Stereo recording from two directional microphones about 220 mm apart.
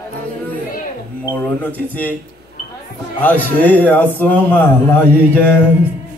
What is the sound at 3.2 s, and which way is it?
A man's voice, 10° left (ahead or behind).